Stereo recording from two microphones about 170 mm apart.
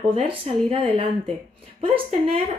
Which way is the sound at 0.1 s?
30° right (ahead or behind).